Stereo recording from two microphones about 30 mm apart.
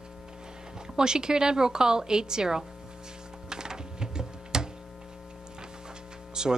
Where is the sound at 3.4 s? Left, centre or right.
Right.